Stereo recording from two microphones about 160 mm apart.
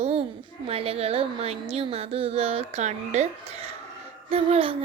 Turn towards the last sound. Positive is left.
turn(degrees=-35)  # may be behind; listen again after turning